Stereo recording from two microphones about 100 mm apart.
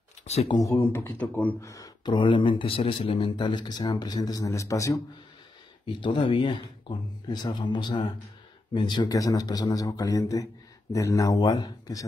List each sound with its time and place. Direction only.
0.3 s speech: 90° left
0.7 s speech: 20° left (ahead or behind)
1.6 s a man's voice: 30° left (ahead or behind)
2.0 s speech: 55° left (ahead or behind); by 5.0 s 35° left (ahead or behind)
5.9 s a man's voice: 60° left (ahead or behind); by 12.1 s 40° left (ahead or behind)